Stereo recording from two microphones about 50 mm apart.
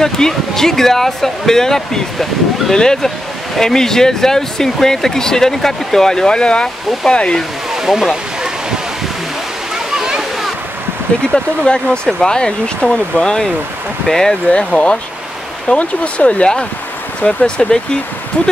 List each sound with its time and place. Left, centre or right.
0.0 s speech: centre
7.7 s a sound: centre
9.9 s waterfall: centre
11.2 s speech: centre
14.5 s speech: left